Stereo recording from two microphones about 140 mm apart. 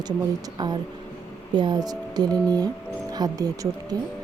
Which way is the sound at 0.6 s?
30° right (ahead or behind).